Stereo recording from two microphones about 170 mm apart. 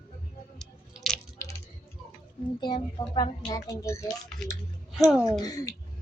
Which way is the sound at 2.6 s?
25° left (ahead or behind).